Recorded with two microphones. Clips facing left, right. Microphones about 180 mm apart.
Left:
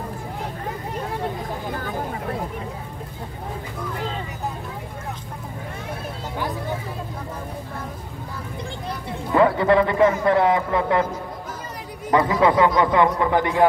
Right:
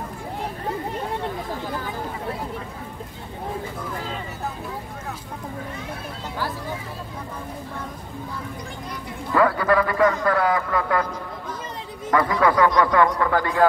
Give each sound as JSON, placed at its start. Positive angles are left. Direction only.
{"t": 9.3, "sound": "a man's voice", "side_deg": 25}
{"t": 12.1, "sound": "speech", "side_deg": 20}